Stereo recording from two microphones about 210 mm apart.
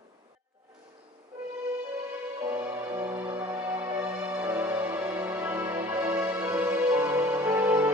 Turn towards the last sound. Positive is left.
turn(degrees=-10)  # may be behind; listen again after turning